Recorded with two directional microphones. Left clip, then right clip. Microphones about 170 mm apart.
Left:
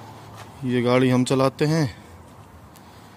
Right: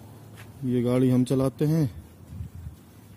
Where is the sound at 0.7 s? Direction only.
15° right (ahead or behind).